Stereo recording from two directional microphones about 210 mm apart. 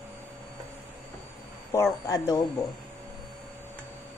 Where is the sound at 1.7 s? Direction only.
15° left (ahead or behind).